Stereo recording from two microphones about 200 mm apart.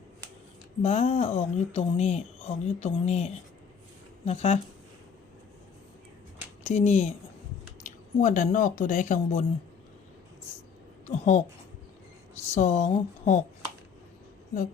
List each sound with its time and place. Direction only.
0.8 s speech: 30° left (ahead or behind)
6.7 s speech: 35° left (ahead or behind)
11.0 s speech: 35° left (ahead or behind)
12.5 s speech: 35° left (ahead or behind)